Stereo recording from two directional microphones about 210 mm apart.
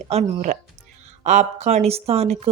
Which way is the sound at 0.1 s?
30° right (ahead or behind).